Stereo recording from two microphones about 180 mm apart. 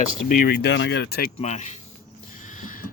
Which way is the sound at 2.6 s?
50° left (ahead or behind).